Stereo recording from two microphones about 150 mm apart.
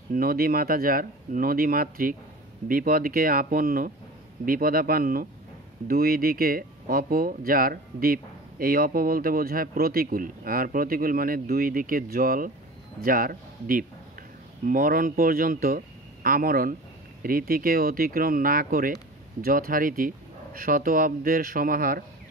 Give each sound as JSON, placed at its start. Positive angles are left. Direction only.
{"t": 0.1, "sound": "speech", "side_deg": -75}